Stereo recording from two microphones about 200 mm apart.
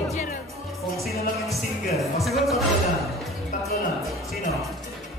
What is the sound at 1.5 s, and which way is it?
Music, centre (ahead or behind).